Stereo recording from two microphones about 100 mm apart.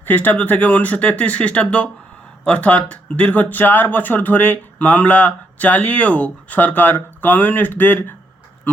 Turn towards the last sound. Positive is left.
turn(degrees=20)  # may be behind; listen again after turning